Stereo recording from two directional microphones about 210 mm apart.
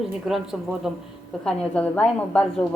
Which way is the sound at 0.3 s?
Centre (ahead or behind).